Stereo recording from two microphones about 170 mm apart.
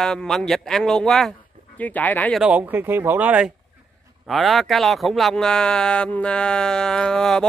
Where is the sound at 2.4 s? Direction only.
10° right (ahead or behind).